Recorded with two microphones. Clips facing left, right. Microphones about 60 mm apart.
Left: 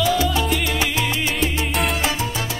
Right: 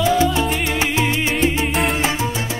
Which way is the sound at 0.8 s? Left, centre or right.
Right.